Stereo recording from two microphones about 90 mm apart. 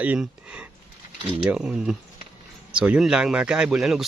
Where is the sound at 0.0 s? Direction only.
15° right (ahead or behind).